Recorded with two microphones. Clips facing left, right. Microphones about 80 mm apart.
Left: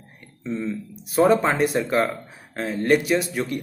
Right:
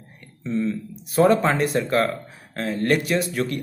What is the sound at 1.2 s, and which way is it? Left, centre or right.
Speech, centre.